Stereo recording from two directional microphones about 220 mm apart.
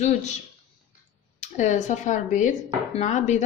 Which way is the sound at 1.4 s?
30° left (ahead or behind).